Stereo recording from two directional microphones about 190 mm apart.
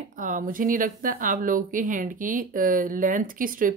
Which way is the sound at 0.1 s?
45° right (ahead or behind).